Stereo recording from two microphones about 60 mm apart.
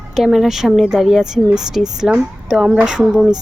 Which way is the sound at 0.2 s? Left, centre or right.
Centre.